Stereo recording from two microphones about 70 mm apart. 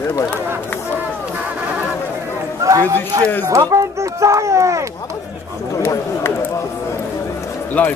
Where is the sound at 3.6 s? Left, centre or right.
Right.